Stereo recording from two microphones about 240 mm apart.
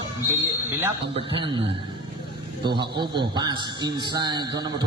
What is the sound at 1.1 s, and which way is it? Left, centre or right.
Speech, right.